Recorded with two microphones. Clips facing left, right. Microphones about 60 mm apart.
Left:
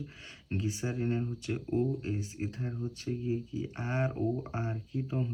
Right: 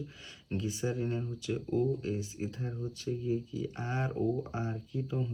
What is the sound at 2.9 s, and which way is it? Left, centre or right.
Speech, left.